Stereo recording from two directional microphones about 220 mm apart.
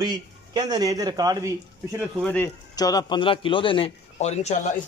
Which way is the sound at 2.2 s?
10° left (ahead or behind).